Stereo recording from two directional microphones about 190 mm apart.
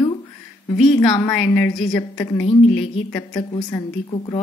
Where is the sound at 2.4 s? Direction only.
30° left (ahead or behind).